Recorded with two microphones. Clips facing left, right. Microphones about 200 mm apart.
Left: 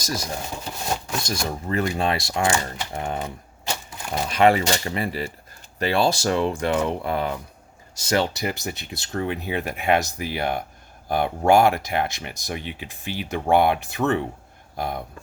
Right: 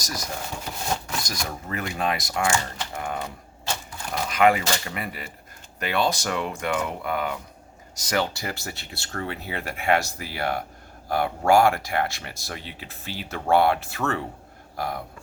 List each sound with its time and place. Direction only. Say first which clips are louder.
0.0 s speech: left 4 dB; 25° left (ahead or behind)